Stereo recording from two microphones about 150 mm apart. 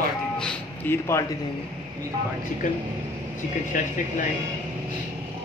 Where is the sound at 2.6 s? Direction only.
60° left (ahead or behind).